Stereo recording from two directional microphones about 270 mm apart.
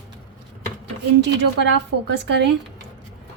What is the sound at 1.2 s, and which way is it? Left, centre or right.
A woman's voice, right.